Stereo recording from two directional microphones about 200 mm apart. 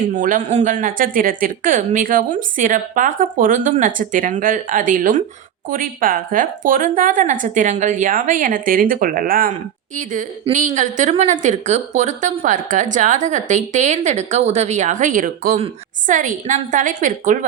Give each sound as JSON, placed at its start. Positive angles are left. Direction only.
{"t": 0.1, "sound": "speech", "side_deg": -40}
{"t": 10.5, "sound": "speech", "side_deg": -40}